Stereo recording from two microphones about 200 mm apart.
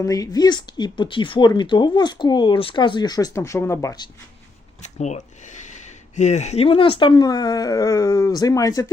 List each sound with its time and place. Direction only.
0.0 s speech: 15° left (ahead or behind)
4.9 s speech: 35° left (ahead or behind); by 8.9 s 15° left (ahead or behind)